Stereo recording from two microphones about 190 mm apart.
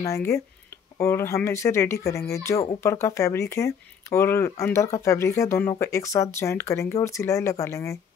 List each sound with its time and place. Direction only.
0.0 s speech: 15° left (ahead or behind)